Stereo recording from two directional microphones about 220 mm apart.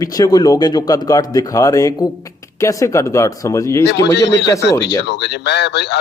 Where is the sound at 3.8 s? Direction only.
50° left (ahead or behind).